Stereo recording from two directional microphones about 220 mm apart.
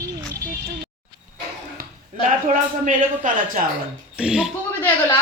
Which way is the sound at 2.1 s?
35° right (ahead or behind).